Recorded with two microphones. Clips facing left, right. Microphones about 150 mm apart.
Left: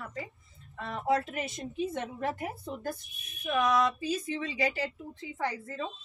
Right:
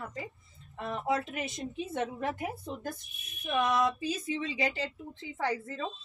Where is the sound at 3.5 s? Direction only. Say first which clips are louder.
Left 1 dB; 25° right (ahead or behind).